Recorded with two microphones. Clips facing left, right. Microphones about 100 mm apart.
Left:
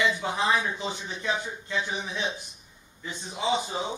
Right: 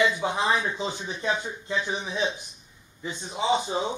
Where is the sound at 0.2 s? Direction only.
20° right (ahead or behind).